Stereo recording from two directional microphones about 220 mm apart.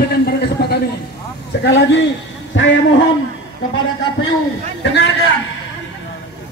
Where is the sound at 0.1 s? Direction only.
45° left (ahead or behind).